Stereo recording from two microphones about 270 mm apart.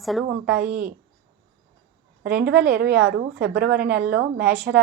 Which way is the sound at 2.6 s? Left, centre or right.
Right.